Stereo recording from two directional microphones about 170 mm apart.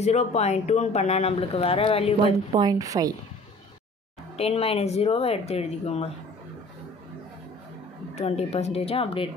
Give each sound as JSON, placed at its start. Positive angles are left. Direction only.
{"t": 0.0, "sound": "speech", "side_deg": 40}
{"t": 2.2, "sound": "a woman's voice", "side_deg": -25}
{"t": 4.4, "sound": "speech", "side_deg": 35}
{"t": 8.1, "sound": "speech", "side_deg": 40}